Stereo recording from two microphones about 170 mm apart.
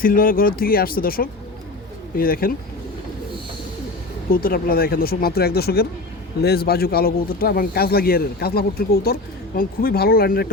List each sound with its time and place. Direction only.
0.0 s speech: 55° left (ahead or behind)
4.3 s speech: 55° left (ahead or behind)